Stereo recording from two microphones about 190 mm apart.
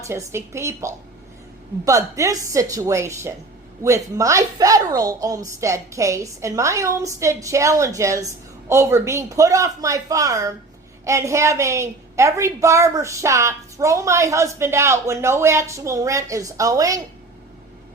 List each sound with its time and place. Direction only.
0.1 s a woman's voice: 15° right (ahead or behind)